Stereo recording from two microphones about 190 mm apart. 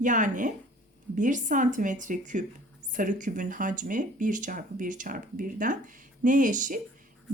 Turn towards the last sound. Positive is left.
turn(degrees=-45)  # may be behind; listen again after turning